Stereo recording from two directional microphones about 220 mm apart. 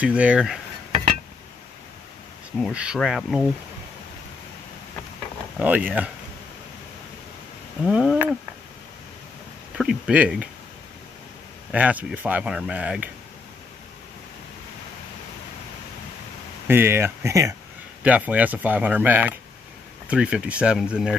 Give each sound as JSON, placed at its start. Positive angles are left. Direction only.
{"t": 0.0, "sound": "speech", "side_deg": -5}
{"t": 2.6, "sound": "speech", "side_deg": -5}
{"t": 5.6, "sound": "speech", "side_deg": -5}
{"t": 7.8, "sound": "speech", "side_deg": 0}
{"t": 9.8, "sound": "speech", "side_deg": -5}
{"t": 11.7, "sound": "speech", "side_deg": -5}
{"t": 16.6, "sound": "speech", "side_deg": -10}